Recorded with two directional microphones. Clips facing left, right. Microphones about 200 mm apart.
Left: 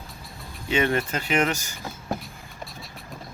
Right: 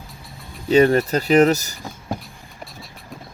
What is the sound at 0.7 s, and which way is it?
Speech, 40° right (ahead or behind).